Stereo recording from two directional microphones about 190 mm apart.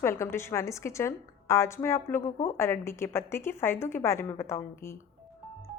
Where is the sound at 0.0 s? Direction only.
15° left (ahead or behind).